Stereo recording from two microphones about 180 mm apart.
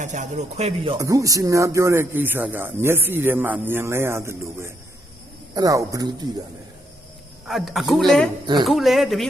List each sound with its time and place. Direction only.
0.0 s speech: 45° right (ahead or behind)
0.9 s a man's voice: 20° right (ahead or behind)
7.4 s a man's voice: centre (ahead or behind)